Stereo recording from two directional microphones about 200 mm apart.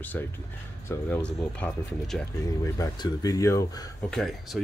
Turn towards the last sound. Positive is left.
turn(degrees=0)  # may be behind; listen again after turning